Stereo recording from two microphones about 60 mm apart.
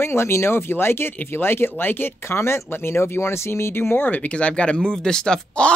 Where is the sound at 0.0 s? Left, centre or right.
Left.